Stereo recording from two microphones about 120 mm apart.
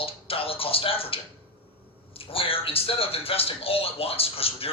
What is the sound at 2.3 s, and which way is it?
Speech, 50° left (ahead or behind).